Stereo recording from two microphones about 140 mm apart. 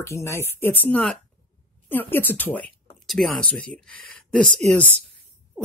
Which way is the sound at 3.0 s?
Centre (ahead or behind).